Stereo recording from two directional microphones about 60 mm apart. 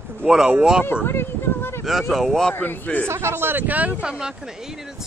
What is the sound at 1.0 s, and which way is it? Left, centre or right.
Speech, left.